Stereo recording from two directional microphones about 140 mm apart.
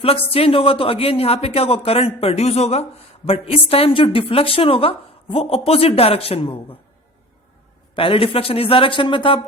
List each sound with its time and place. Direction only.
0.0 s a woman's voice: 45° left (ahead or behind)
7.9 s speech: 40° left (ahead or behind)